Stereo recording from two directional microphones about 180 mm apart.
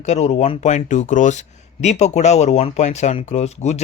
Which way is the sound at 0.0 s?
40° left (ahead or behind).